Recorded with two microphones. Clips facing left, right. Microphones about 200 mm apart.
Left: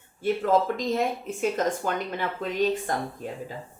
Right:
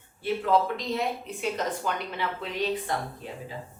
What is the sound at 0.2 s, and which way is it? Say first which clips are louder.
Speech: left 2 dB; 45° left (ahead or behind).